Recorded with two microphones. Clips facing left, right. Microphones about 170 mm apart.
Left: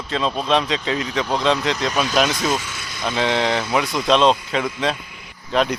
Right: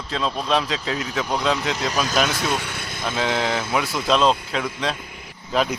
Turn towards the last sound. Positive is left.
turn(degrees=0)  # may be behind; listen again after turning